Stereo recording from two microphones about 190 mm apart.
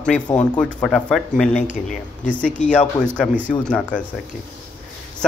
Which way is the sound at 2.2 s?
40° left (ahead or behind).